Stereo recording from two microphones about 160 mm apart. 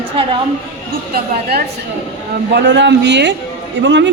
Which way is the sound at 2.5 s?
90° right.